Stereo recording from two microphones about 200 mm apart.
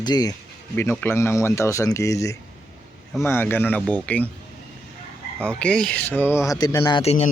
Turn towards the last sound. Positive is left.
turn(degrees=30)  # may be behind; listen again after turning